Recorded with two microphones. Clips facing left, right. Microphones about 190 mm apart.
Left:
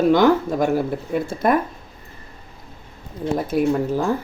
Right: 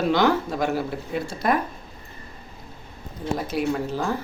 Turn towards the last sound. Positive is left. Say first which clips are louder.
# left 6 dB
turn(degrees=50)  # may be behind; listen again after turning